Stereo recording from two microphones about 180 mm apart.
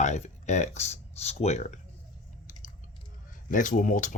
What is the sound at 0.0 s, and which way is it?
Speech, 40° left (ahead or behind).